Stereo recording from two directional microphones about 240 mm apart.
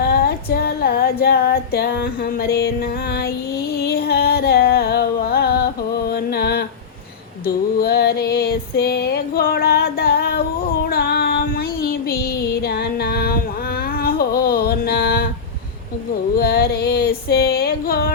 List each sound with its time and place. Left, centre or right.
0.5 s female singing: left
3.8 s music: left
10.8 s a sound: left
16.4 s female singing: left